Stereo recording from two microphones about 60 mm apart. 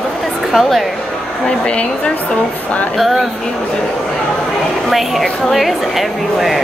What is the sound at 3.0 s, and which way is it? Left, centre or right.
Speech, centre.